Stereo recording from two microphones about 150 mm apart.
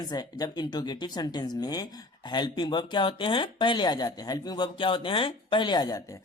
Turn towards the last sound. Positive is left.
turn(degrees=25)  # may be behind; listen again after turning